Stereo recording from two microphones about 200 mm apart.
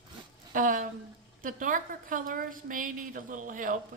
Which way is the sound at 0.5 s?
40° right (ahead or behind).